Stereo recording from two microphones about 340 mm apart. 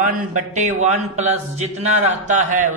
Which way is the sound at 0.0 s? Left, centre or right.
Right.